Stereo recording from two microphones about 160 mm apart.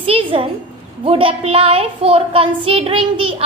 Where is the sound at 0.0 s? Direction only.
35° right (ahead or behind).